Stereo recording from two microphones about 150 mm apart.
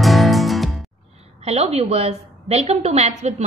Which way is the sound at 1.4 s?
45° right (ahead or behind).